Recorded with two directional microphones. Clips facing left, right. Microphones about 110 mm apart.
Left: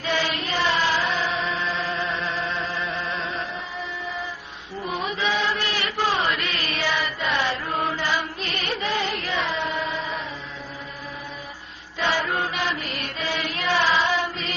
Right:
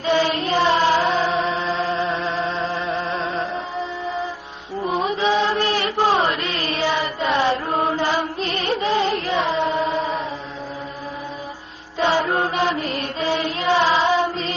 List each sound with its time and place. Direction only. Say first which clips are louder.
0.0 s child singing: right 7 dB; 30° right (ahead or behind)
1.2 s music: right 5 dB; 35° right (ahead or behind)
4.8 s chant: right 6 dB; 30° right (ahead or behind)
9.9 s chant: right 7 dB; 45° right (ahead or behind)
11.9 s mantra: right 5 dB; 30° right (ahead or behind)
13.8 s child singing: right 2 dB; 15° right (ahead or behind)
14.1 s music: right 6 dB; 30° right (ahead or behind)